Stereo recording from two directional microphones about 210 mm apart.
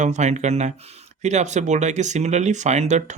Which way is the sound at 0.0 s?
35° right (ahead or behind).